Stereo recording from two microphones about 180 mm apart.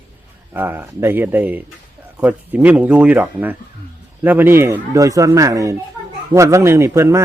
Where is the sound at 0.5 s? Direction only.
10° right (ahead or behind).